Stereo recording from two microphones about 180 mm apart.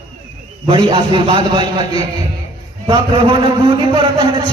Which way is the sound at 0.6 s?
30° right (ahead or behind).